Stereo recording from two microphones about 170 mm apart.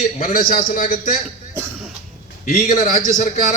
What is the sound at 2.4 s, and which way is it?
A man's voice, 55° left (ahead or behind).